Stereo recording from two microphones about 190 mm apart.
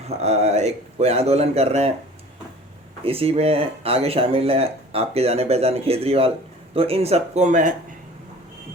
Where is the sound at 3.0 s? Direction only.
30° right (ahead or behind).